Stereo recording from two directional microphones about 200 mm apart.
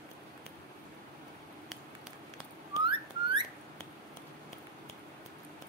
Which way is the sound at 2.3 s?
25° right (ahead or behind).